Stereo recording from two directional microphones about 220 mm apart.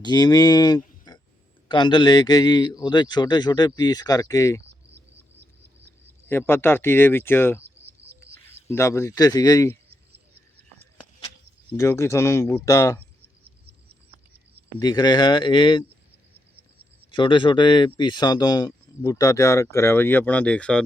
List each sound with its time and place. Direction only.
0.0 s a man's voice: 20° left (ahead or behind)
6.2 s a man's voice: 10° left (ahead or behind)
8.0 s bird: 25° right (ahead or behind)
8.7 s a man's voice: 10° left (ahead or behind)
11.7 s a man's voice: 10° left (ahead or behind)
14.8 s a man's voice: 20° left (ahead or behind)
17.1 s a man's voice: 20° left (ahead or behind); by 20.8 s 5° left (ahead or behind)